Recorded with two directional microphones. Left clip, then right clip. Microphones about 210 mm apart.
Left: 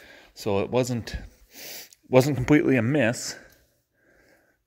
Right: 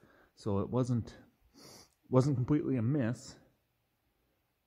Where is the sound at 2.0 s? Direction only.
5° right (ahead or behind).